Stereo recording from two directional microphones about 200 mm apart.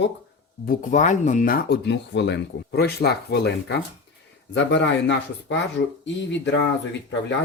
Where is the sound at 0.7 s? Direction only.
40° left (ahead or behind); by 5.5 s 65° left (ahead or behind).